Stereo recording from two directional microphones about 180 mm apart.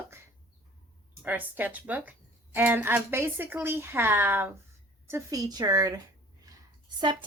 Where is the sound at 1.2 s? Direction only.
10° right (ahead or behind).